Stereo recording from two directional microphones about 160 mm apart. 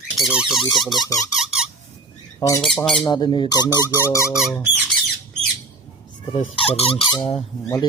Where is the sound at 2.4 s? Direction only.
30° left (ahead or behind).